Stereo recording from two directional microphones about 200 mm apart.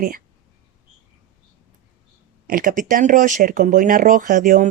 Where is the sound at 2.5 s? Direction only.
45° right (ahead or behind).